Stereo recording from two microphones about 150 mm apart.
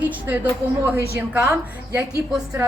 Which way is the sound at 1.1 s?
20° right (ahead or behind).